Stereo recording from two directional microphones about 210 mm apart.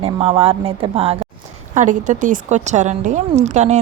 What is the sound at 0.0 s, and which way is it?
A woman's voice, 30° right (ahead or behind).